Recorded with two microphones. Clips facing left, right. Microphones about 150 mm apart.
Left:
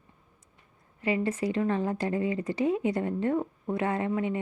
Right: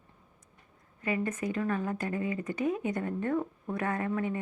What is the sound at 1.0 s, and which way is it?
Speech, 30° left (ahead or behind).